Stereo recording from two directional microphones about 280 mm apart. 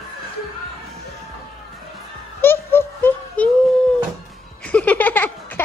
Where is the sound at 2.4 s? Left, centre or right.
Centre.